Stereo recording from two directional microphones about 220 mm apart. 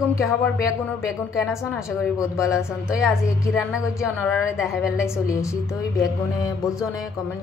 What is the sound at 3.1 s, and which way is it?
Speech, centre (ahead or behind).